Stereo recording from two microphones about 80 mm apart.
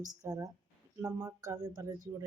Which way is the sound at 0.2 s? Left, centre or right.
Right.